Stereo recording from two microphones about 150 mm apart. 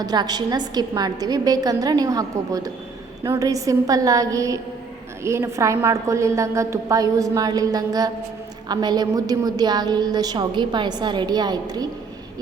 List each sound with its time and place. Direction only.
0.0 s a woman's voice: 25° right (ahead or behind)